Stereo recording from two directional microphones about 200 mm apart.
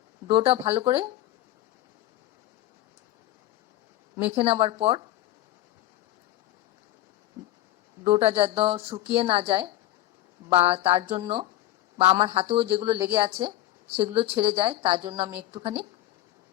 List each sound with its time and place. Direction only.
0.3 s a woman's voice: 25° right (ahead or behind)
4.4 s a woman's voice: 30° right (ahead or behind)
8.1 s a woman's voice: 30° right (ahead or behind)